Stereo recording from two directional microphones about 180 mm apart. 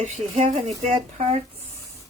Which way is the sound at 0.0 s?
40° right (ahead or behind).